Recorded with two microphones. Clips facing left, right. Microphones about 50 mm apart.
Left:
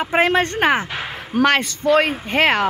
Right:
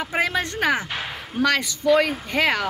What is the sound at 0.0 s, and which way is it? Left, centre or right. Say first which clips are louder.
Speech: left 6 dB; left.